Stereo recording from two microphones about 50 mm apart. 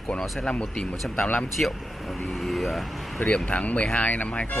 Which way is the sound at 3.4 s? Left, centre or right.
Left.